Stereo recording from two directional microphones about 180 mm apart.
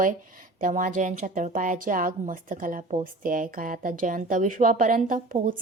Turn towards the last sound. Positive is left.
turn(degrees=-50)  # may be behind; listen again after turning